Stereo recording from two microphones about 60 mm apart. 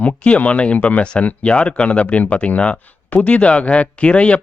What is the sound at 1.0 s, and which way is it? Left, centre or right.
Speech, centre.